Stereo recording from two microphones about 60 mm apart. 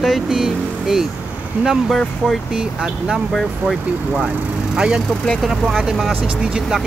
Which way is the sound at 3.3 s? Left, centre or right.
Centre.